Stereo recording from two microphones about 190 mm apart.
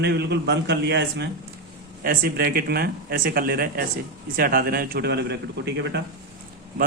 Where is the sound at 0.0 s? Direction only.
60° right (ahead or behind).